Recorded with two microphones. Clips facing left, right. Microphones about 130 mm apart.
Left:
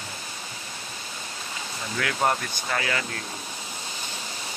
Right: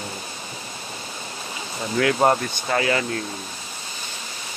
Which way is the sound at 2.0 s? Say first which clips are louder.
Right 7 dB; 30° right (ahead or behind).